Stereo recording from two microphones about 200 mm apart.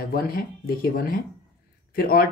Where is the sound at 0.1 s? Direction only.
45° left (ahead or behind).